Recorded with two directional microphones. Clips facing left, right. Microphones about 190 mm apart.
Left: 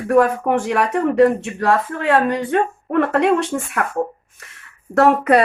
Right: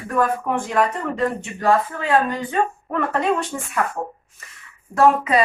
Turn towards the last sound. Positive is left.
turn(degrees=70)  # may be behind; listen again after turning